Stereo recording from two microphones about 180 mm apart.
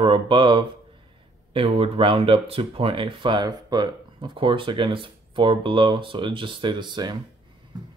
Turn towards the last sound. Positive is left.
turn(degrees=-25)  # may be behind; listen again after turning